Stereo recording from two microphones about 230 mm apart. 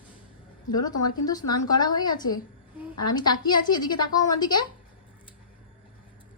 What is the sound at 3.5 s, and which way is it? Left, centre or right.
A woman's voice, centre.